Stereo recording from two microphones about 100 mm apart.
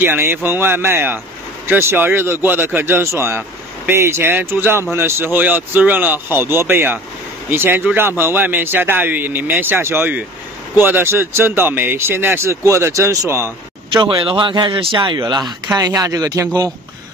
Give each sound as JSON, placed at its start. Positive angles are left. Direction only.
{"t": 0.0, "sound": "speech", "side_deg": -20}
{"t": 13.9, "sound": "speech", "side_deg": -55}
{"t": 15.1, "sound": "speech", "side_deg": -45}